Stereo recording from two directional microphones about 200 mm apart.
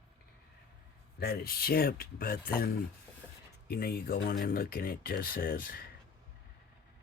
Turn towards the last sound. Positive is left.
turn(degrees=45)  # may be behind; listen again after turning